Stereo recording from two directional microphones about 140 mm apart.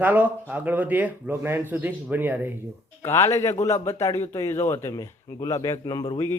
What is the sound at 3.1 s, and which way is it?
Speech, 20° left (ahead or behind).